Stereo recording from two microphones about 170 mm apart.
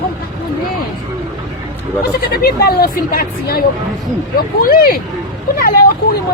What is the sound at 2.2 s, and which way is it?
Speech, 65° left (ahead or behind).